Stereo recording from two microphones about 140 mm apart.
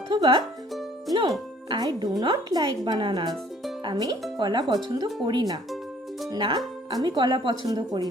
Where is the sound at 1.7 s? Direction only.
30° right (ahead or behind).